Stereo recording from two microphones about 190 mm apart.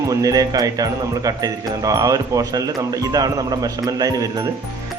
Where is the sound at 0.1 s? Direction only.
20° right (ahead or behind).